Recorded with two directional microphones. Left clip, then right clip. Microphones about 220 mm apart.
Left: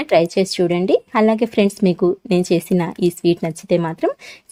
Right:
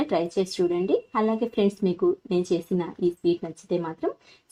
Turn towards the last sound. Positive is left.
turn(degrees=45)  # may be behind; listen again after turning